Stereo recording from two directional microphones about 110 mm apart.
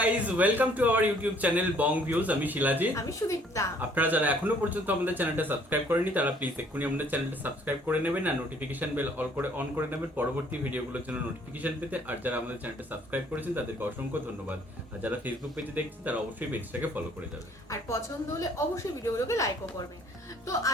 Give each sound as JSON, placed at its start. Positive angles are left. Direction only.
{"t": 0.0, "sound": "speech", "side_deg": -15}
{"t": 2.9, "sound": "a woman's voice", "side_deg": 30}
{"t": 3.8, "sound": "speech", "side_deg": -15}
{"t": 11.6, "sound": "speech", "side_deg": -15}
{"t": 17.7, "sound": "a woman's voice", "side_deg": 30}